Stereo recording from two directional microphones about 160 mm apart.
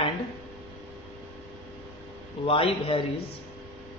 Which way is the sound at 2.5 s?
35° left (ahead or behind).